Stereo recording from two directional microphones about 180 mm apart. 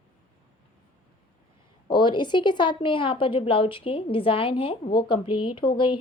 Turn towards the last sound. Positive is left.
turn(degrees=25)  # may be behind; listen again after turning